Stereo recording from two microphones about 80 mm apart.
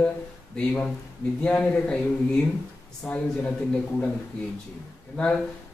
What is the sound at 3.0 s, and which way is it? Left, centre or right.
Speech, centre.